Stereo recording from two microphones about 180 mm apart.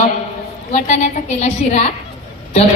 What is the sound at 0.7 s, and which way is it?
A woman's voice, 40° left (ahead or behind).